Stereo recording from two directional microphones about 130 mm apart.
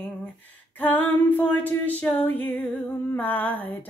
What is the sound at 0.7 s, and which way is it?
Female singing, 15° left (ahead or behind).